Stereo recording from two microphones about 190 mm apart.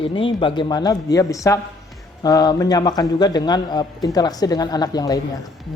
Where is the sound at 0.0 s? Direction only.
25° left (ahead or behind).